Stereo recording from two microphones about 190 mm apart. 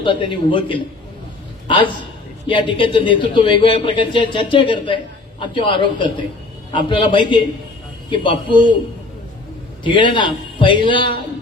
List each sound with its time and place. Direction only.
0.0 s a man's voice: 25° left (ahead or behind)
1.6 s a sound: 25° left (ahead or behind)
2.5 s a man's voice: 25° left (ahead or behind)
9.8 s a man's voice: 25° left (ahead or behind)